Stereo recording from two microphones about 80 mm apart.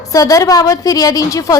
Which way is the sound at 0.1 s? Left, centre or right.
Left.